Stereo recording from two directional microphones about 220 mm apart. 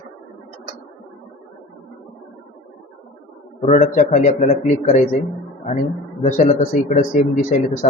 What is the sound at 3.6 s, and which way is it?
A man's voice, 35° left (ahead or behind).